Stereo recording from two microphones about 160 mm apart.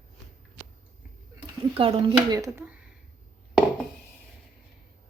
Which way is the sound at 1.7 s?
30° right (ahead or behind).